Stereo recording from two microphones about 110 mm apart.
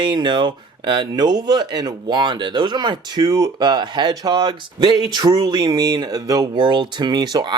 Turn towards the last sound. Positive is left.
turn(degrees=-40)  # may be behind; listen again after turning